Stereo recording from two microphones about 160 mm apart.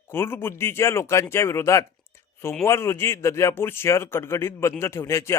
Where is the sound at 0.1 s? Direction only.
15° left (ahead or behind).